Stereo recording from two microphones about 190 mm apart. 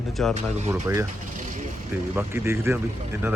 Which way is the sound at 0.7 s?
15° right (ahead or behind).